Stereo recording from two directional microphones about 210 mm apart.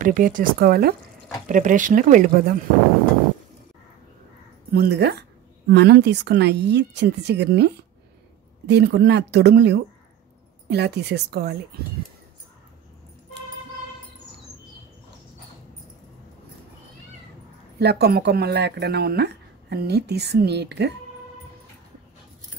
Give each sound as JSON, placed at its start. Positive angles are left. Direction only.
{"t": 0.0, "sound": "speech", "side_deg": -40}
{"t": 4.7, "sound": "speech", "side_deg": -50}
{"t": 17.7, "sound": "speech", "side_deg": -50}